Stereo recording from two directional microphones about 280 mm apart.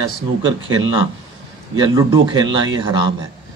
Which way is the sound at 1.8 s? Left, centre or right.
Centre.